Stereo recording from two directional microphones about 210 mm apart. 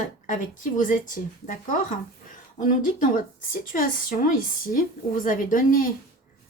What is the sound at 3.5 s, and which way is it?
A woman's voice, 40° left (ahead or behind).